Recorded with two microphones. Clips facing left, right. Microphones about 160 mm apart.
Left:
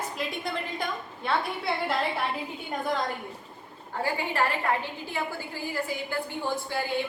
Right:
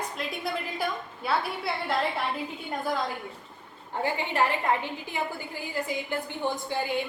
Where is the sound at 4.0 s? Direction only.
20° right (ahead or behind).